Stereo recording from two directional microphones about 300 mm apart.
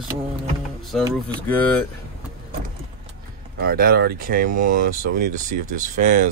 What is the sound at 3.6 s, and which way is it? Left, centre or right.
Speech, right.